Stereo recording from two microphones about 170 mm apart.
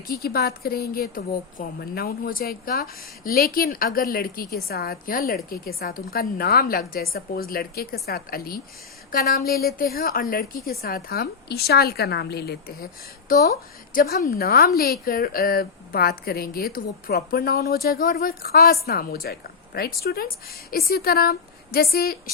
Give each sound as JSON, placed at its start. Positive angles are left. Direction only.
{"t": 0.1, "sound": "a woman's voice", "side_deg": 65}